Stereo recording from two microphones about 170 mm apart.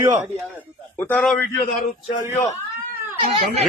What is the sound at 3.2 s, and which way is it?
Speech, 45° right (ahead or behind).